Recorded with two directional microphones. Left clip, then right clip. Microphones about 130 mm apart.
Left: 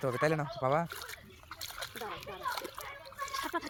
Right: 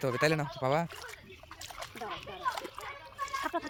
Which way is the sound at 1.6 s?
30° left (ahead or behind).